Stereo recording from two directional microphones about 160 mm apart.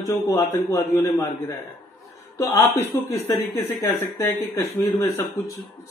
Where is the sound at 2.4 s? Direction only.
15° left (ahead or behind).